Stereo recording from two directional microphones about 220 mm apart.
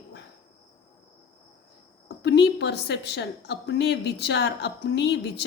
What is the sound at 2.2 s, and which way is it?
A woman's voice, 50° left (ahead or behind).